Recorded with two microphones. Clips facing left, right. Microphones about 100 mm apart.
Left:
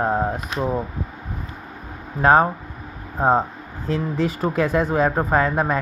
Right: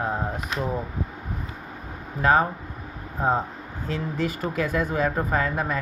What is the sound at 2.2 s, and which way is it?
Speech, 35° left (ahead or behind).